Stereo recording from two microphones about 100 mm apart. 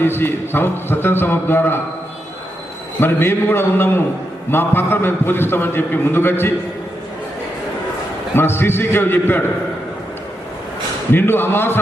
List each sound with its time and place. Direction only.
0.0 s a man's voice: 25° left (ahead or behind)
3.0 s a man's voice: 20° left (ahead or behind)
8.4 s a man's voice: 20° left (ahead or behind)
11.1 s a man's voice: 20° left (ahead or behind)